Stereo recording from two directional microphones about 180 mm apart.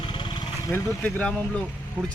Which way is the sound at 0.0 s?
25° left (ahead or behind).